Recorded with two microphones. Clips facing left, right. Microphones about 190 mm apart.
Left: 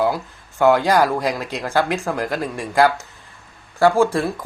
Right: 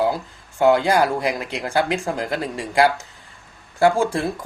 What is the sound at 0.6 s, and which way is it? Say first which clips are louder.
Speech: left 1 dB; 20° right (ahead or behind).